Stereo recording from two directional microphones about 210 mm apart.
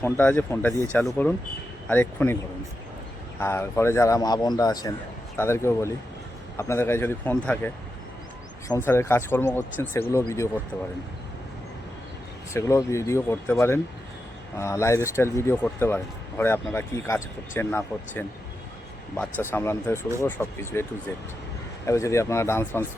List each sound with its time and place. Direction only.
0.0 s speech: 10° left (ahead or behind)
3.4 s speech: 10° left (ahead or behind)
12.5 s speech: 15° left (ahead or behind)
21.8 s speech: 15° left (ahead or behind)